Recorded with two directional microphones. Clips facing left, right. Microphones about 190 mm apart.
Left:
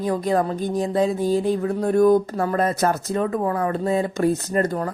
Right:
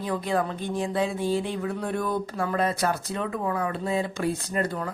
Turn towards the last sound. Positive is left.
turn(degrees=45)  # may be behind; listen again after turning